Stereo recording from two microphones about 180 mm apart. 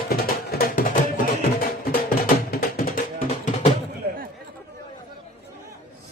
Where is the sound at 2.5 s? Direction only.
55° left (ahead or behind).